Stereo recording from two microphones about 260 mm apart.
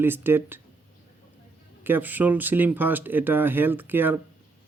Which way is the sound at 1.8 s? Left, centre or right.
Centre.